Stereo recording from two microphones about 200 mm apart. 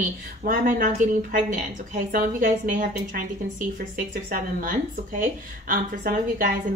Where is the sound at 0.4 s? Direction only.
45° right (ahead or behind).